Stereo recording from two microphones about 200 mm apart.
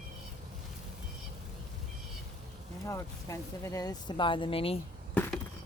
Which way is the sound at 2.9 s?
15° left (ahead or behind).